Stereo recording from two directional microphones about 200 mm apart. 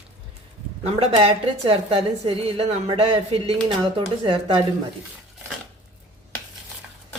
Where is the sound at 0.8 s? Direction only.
30° right (ahead or behind).